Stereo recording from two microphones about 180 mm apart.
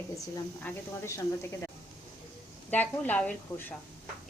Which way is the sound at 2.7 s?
10° left (ahead or behind).